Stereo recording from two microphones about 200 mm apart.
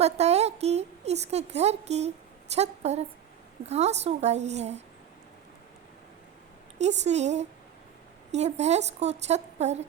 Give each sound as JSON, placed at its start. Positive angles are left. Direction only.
{"t": 0.0, "sound": "a woman's voice", "side_deg": -30}
{"t": 6.7, "sound": "a woman's voice", "side_deg": -35}